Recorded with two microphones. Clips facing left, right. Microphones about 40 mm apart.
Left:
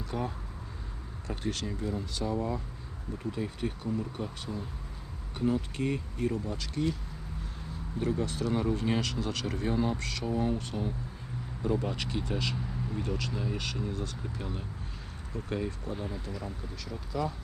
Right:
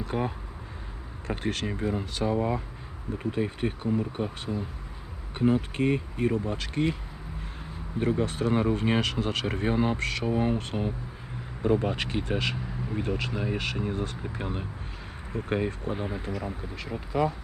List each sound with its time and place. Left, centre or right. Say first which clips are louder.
0.0 s speech: right 5 dB; right
7.9 s speech: right 4 dB; right